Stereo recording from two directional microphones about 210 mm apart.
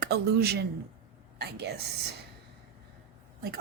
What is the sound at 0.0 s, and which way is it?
Speech, 50° right (ahead or behind).